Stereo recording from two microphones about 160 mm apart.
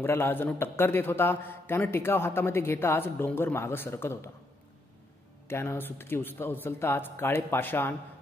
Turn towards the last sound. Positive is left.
turn(degrees=15)  # may be behind; listen again after turning